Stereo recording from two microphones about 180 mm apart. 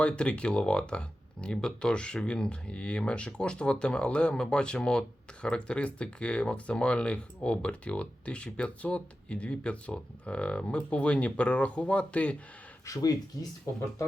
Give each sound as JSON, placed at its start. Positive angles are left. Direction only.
{"t": 0.0, "sound": "speech", "side_deg": 5}
{"t": 12.8, "sound": "speech", "side_deg": 20}